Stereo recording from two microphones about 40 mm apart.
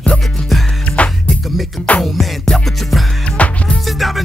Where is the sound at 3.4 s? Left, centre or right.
Left.